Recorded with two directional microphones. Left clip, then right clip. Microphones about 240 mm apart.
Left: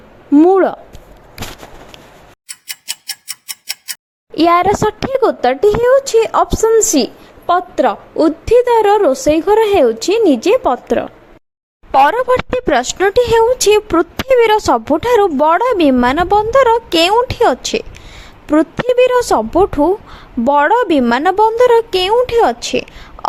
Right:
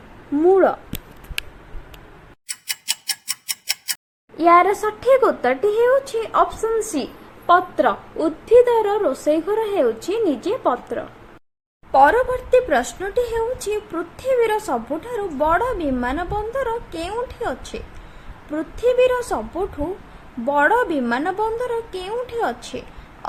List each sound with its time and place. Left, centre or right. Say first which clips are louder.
0.3 s a sound: left 6 dB; left
2.5 s tick-tock: even; centre
4.4 s speech: left 3 dB; left